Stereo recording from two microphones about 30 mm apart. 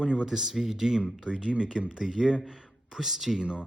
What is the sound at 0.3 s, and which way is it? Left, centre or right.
A man's voice, centre.